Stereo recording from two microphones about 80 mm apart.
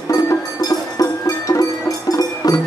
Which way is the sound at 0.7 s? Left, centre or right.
Left.